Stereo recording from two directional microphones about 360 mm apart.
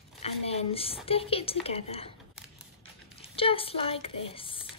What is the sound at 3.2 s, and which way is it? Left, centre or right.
Speech, centre.